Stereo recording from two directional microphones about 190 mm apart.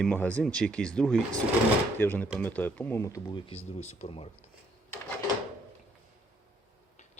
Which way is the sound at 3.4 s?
30° left (ahead or behind).